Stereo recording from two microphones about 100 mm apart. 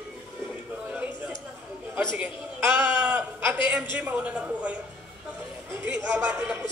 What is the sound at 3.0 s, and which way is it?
A man's voice, 15° right (ahead or behind).